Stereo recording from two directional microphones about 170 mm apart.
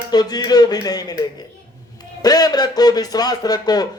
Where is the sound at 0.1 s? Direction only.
25° left (ahead or behind).